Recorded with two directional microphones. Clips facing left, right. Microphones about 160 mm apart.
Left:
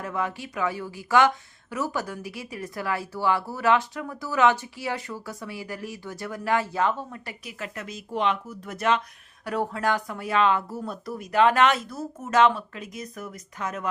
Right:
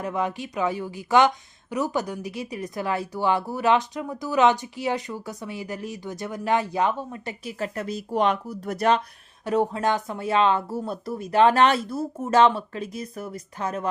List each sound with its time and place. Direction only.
0.0 s a woman's voice: 20° right (ahead or behind)
7.6 s speech: 35° right (ahead or behind)
9.4 s a woman's voice: 20° right (ahead or behind)